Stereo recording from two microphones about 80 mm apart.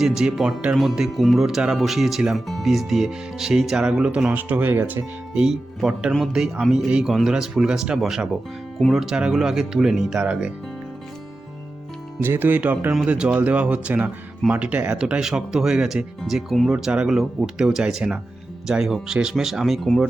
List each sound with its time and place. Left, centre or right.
0.0 s speech: centre; by 5.0 s right
5.3 s speech: centre
12.2 s speech: right; by 20.1 s centre